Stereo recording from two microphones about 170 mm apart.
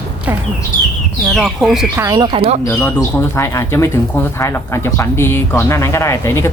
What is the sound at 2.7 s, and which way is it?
Speech, 15° left (ahead or behind).